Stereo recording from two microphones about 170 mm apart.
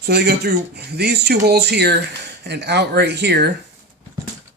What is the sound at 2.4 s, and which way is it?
Speech, 90° right.